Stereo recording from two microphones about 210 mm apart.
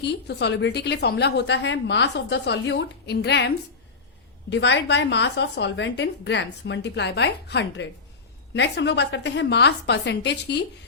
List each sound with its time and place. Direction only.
0.0 s a woman's voice: 55° left (ahead or behind)